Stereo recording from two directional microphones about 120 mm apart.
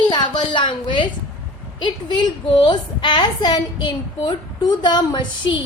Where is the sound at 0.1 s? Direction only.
40° left (ahead or behind).